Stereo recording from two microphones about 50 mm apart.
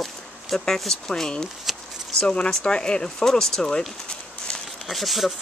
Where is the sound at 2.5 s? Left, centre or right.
Centre.